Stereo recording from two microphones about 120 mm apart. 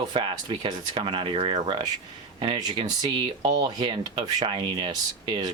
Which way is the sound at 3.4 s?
35° right (ahead or behind).